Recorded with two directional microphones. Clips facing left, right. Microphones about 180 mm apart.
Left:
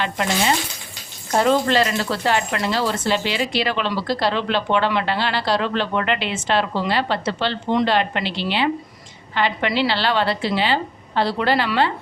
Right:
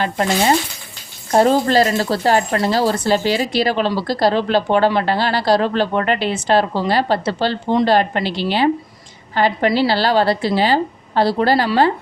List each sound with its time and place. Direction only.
0.0 s speech: 40° right (ahead or behind)